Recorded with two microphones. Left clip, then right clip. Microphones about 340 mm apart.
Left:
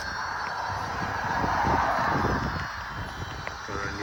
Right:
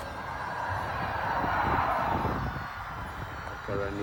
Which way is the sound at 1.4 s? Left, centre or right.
Left.